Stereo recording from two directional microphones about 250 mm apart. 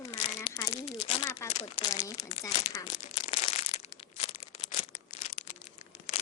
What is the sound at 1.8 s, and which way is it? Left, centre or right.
Speech, centre.